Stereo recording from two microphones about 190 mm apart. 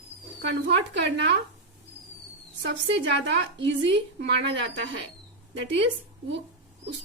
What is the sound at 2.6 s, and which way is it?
A woman's voice, 70° right (ahead or behind).